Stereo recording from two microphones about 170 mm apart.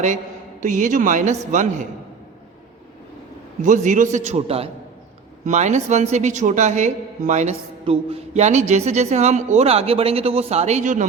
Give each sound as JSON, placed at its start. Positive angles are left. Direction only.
{"t": 0.6, "sound": "a woman's voice", "side_deg": -50}
{"t": 3.6, "sound": "a woman's voice", "side_deg": -50}